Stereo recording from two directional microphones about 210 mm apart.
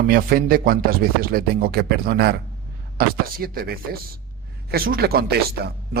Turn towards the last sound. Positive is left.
turn(degrees=-45)  # may be behind; listen again after turning